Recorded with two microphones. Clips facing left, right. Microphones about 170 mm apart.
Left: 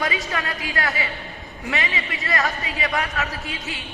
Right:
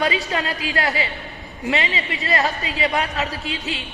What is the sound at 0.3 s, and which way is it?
A woman's voice, 25° right (ahead or behind).